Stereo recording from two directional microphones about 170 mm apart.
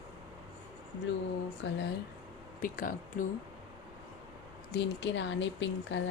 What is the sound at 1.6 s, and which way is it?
Speech, 90° left.